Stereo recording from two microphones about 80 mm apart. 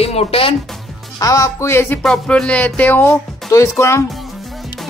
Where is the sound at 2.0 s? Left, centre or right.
Centre.